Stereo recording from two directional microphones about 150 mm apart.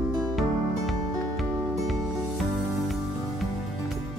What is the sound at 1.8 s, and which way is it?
Music, centre (ahead or behind).